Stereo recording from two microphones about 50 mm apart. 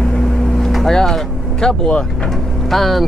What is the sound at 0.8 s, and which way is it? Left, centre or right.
Speech, centre.